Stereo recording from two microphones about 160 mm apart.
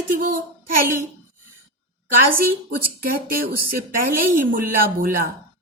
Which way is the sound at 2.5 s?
70° right (ahead or behind).